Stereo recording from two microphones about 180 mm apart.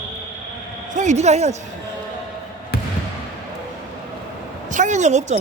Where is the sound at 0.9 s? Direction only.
40° right (ahead or behind).